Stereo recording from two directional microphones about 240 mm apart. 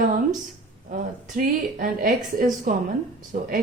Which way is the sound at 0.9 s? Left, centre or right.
Right.